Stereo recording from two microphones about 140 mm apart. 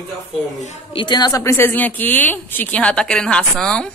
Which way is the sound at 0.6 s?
55° left (ahead or behind).